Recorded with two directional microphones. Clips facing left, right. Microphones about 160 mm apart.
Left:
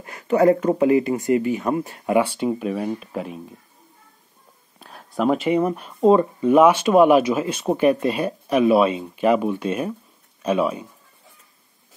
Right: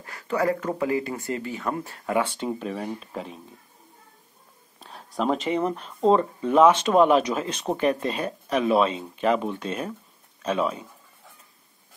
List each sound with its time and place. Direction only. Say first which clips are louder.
0.0 s speech: left 8 dB; 20° left (ahead or behind)
4.7 s speech: left 4 dB; 5° left (ahead or behind)